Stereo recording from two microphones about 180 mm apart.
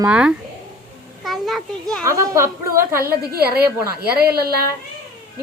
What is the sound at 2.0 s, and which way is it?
Speech, 15° right (ahead or behind).